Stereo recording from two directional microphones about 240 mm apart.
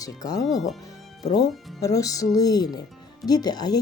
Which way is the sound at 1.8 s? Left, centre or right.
Centre.